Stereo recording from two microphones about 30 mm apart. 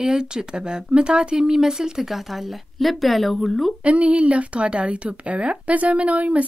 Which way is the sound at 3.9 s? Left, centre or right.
Right.